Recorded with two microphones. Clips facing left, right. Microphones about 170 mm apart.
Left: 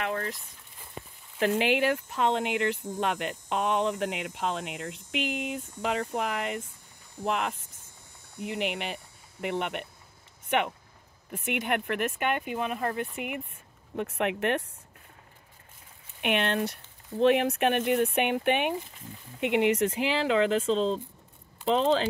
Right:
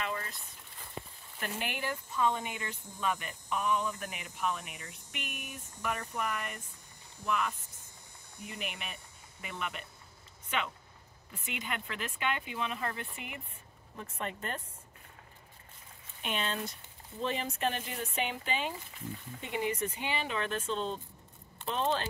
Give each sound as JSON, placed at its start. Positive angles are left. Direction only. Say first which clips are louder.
{"t": 0.0, "sound": "a sound", "louder": "left 6 dB", "side_deg": 65}
{"t": 1.4, "sound": "speech", "louder": "left 13 dB", "side_deg": 90}
{"t": 7.2, "sound": "speech", "louder": "left 4 dB", "side_deg": 70}
{"t": 13.9, "sound": "speech", "louder": "left 11 dB", "side_deg": 75}
{"t": 16.2, "sound": "speech", "louder": "left 9 dB", "side_deg": 70}
{"t": 19.4, "sound": "speech", "louder": "left 10 dB", "side_deg": 75}